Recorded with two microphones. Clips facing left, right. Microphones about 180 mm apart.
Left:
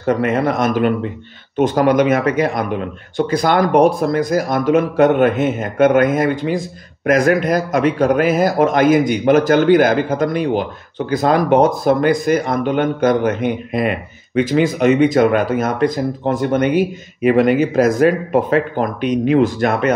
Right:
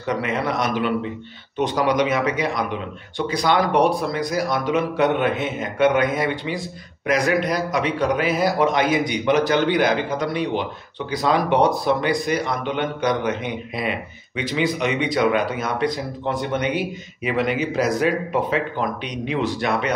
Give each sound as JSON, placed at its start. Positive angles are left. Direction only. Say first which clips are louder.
{"t": 0.0, "sound": "speech", "louder": "left 7 dB", "side_deg": 50}